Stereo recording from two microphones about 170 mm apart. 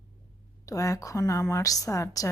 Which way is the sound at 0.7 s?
20° left (ahead or behind).